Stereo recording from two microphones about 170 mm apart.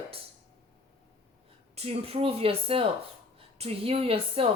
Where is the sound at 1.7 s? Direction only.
35° right (ahead or behind).